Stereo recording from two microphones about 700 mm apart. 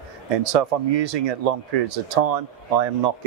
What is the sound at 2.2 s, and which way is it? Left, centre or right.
Speech, right.